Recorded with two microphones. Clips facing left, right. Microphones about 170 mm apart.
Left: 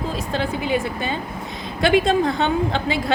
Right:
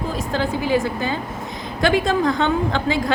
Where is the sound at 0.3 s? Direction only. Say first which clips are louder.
Right 3 dB; 20° left (ahead or behind).